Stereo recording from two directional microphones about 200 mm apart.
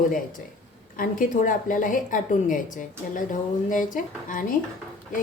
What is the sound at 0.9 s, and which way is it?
A woman's voice, 45° left (ahead or behind).